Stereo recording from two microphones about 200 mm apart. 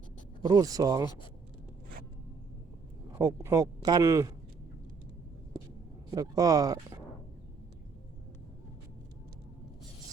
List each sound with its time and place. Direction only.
0.4 s speech: 20° right (ahead or behind)
3.1 s speech: 15° right (ahead or behind)
6.1 s speech: 20° right (ahead or behind)